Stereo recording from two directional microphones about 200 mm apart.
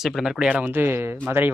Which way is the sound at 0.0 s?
Centre (ahead or behind).